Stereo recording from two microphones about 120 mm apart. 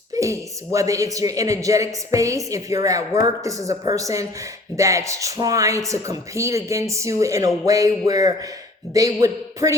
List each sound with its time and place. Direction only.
0.1 s a woman's voice: 25° right (ahead or behind)